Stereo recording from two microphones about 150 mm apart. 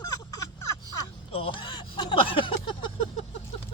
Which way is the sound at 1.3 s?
35° left (ahead or behind).